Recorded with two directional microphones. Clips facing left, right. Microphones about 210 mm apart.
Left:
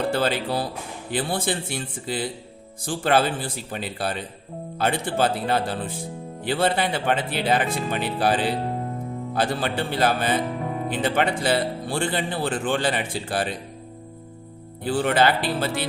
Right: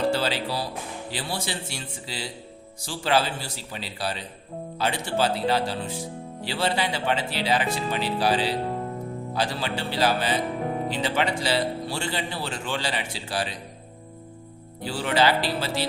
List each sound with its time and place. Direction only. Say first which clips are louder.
0.1 s speech: left 3 dB; 55° left (ahead or behind)
14.8 s speech: left 3 dB; 55° left (ahead or behind)